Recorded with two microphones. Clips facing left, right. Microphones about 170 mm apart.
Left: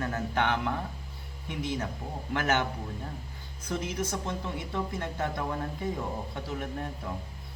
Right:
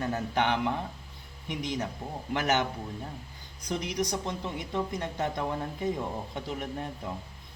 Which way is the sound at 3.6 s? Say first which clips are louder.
Right 1 dB; 15° right (ahead or behind).